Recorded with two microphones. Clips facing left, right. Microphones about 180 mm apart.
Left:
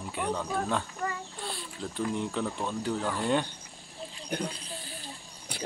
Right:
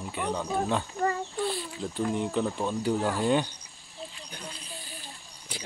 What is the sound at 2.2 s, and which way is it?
Speech, 5° right (ahead or behind).